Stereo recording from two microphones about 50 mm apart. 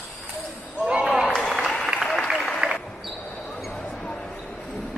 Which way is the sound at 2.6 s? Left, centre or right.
Centre.